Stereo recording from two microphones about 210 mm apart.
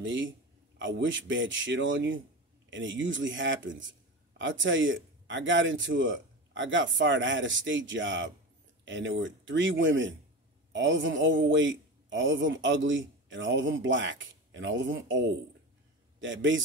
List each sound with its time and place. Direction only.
0.0 s a man's voice: 65° right (ahead or behind)